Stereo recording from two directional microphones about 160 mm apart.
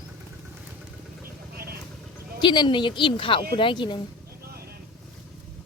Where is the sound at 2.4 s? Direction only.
30° left (ahead or behind).